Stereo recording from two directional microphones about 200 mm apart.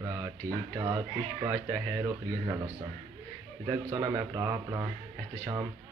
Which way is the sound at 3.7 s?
15° right (ahead or behind).